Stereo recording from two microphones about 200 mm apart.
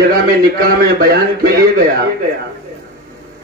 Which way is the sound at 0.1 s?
45° right (ahead or behind).